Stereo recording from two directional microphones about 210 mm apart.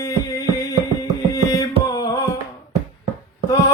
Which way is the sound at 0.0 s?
15° left (ahead or behind).